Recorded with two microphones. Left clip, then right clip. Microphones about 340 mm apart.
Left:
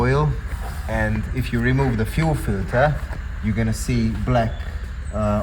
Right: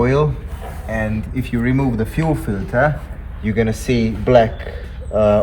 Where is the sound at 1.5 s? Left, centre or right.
Left.